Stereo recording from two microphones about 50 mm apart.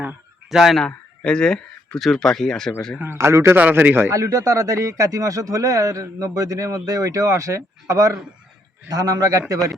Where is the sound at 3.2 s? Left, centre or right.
Right.